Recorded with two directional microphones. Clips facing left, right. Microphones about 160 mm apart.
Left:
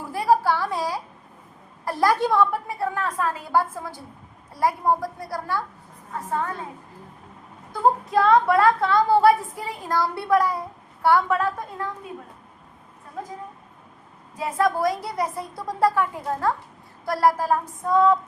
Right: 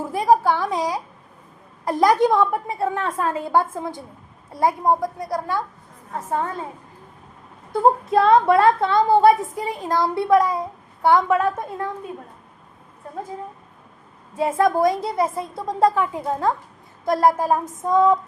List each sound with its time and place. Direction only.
0.1 s a sound: 20° right (ahead or behind)
1.8 s speech: 20° right (ahead or behind)
7.7 s speech: 25° right (ahead or behind)
14.3 s speech: 25° right (ahead or behind)